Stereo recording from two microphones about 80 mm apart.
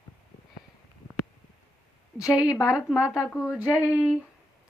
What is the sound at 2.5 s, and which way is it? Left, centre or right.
Speech, left.